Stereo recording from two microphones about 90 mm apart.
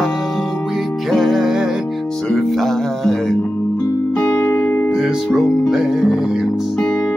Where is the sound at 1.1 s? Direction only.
Centre (ahead or behind).